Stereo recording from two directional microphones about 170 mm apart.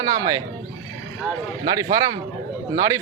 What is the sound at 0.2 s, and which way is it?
Speech, 20° right (ahead or behind).